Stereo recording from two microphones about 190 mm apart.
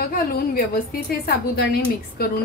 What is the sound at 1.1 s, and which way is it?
A woman's voice, 55° left (ahead or behind).